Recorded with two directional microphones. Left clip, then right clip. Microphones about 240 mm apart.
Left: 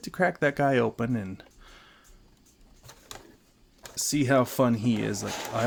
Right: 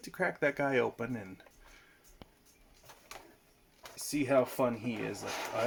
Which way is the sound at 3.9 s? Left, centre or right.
Left.